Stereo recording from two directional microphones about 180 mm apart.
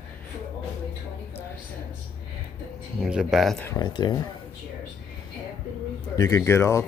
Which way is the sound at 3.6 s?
20° left (ahead or behind).